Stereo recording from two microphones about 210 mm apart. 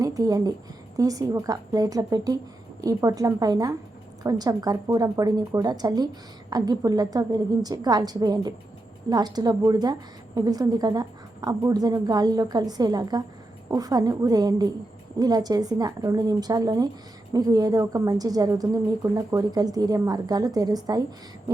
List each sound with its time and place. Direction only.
0.0 s a woman's voice: 15° right (ahead or behind)